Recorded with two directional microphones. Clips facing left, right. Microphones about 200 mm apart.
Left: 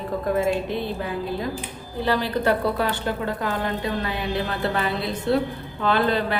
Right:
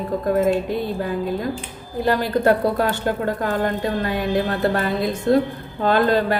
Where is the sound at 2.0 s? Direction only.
45° right (ahead or behind).